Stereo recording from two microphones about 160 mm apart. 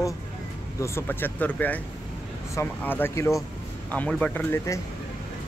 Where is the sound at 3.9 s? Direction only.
5° left (ahead or behind).